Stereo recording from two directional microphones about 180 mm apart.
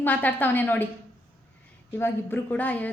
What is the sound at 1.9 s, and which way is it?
A woman's voice, 10° left (ahead or behind).